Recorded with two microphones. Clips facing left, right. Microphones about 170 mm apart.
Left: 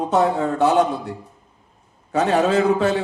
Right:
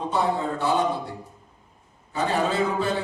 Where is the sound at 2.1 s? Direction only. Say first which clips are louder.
Left 7 dB; 90° left.